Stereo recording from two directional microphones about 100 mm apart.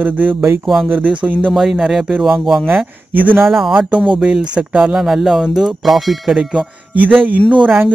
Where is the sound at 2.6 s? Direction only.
20° right (ahead or behind).